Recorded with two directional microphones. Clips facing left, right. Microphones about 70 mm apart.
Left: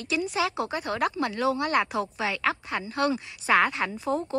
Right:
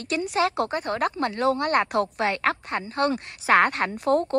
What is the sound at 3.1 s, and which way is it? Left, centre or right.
A woman's voice, right.